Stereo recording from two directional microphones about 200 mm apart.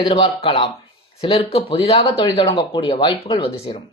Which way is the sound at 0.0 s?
25° left (ahead or behind).